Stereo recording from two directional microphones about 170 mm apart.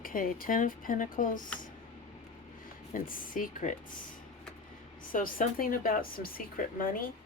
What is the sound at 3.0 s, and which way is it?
Speech, 55° left (ahead or behind).